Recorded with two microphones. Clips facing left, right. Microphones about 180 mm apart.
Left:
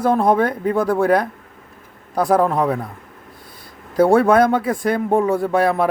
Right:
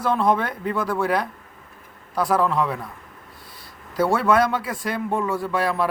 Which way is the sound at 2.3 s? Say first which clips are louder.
Left 5 dB; 45° left (ahead or behind).